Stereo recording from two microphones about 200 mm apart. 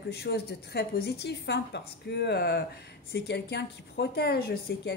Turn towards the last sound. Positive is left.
turn(degrees=50)  # may be behind; listen again after turning